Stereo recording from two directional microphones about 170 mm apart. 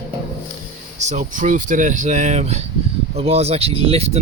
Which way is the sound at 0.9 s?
40° right (ahead or behind).